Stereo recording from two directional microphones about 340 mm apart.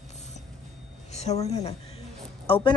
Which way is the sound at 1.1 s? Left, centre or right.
Centre.